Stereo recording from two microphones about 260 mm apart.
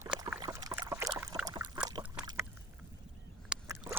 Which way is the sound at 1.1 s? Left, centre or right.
Centre.